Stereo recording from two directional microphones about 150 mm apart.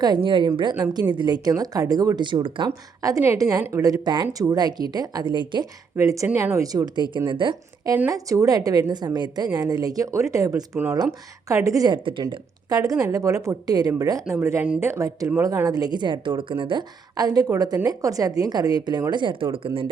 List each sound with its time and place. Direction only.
0.0 s a woman's voice: 30° right (ahead or behind)
6.0 s speech: 20° right (ahead or behind)
7.9 s speech: 20° right (ahead or behind); by 19.9 s 35° right (ahead or behind)